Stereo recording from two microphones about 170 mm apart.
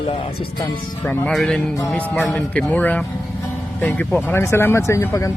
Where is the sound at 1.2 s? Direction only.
5° left (ahead or behind).